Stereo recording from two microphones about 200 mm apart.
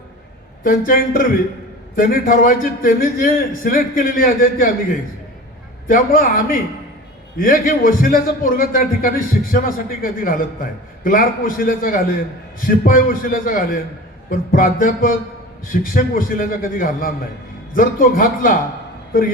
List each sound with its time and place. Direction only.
0.6 s a man's voice: 45° left (ahead or behind)